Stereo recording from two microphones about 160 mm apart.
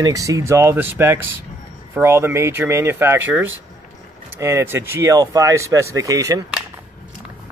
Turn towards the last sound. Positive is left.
turn(degrees=-20)  # may be behind; listen again after turning